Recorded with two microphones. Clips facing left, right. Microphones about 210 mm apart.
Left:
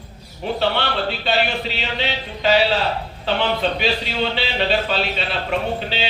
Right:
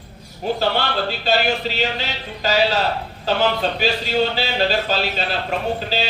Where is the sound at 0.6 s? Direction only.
40° right (ahead or behind).